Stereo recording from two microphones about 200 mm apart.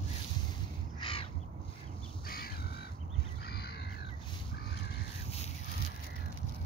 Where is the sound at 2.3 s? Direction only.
50° left (ahead or behind).